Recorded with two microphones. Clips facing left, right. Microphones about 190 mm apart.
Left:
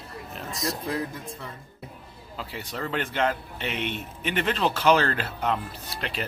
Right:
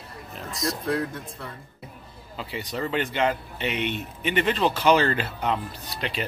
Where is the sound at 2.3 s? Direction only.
Centre (ahead or behind).